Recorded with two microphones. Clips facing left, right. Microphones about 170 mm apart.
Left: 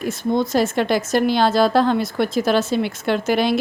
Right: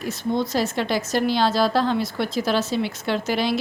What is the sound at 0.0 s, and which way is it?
A woman's voice, 50° left (ahead or behind).